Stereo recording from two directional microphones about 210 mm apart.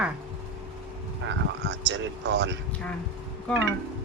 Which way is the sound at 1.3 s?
60° right (ahead or behind).